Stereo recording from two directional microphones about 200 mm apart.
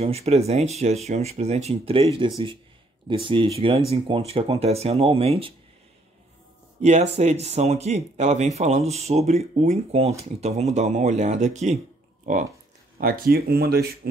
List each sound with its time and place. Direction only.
0.0 s speech: 30° right (ahead or behind)
6.8 s speech: 35° right (ahead or behind)
12.9 s speech: 45° right (ahead or behind)